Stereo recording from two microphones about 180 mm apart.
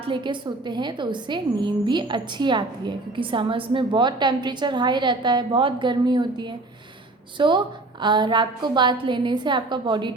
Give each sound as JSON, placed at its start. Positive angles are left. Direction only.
{"t": 0.1, "sound": "a woman's voice", "side_deg": -25}